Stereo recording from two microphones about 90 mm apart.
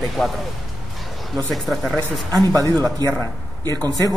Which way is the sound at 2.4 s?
45° right (ahead or behind).